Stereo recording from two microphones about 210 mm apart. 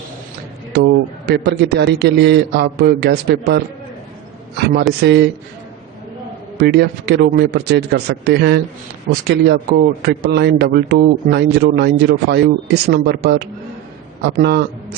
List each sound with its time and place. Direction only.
1.3 s speech: 50° right (ahead or behind)
6.6 s speech: 50° right (ahead or behind)